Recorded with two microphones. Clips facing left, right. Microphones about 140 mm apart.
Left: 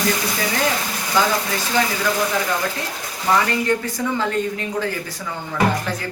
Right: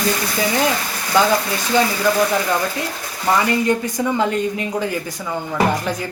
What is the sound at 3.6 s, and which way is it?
Speech, 15° right (ahead or behind).